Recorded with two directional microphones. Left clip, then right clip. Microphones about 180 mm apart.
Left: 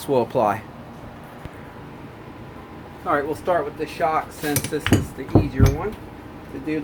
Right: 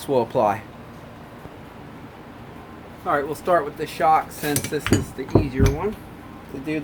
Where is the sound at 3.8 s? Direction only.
55° right (ahead or behind).